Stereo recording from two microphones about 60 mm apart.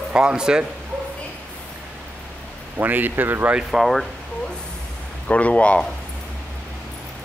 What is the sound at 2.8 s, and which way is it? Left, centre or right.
Speech, right.